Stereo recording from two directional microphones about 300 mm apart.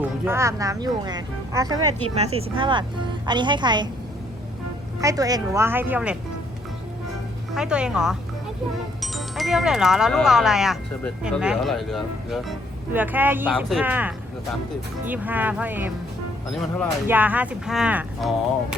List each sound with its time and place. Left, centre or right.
0.0 s a woman's voice: centre
4.9 s a woman's voice: centre
7.5 s speech: centre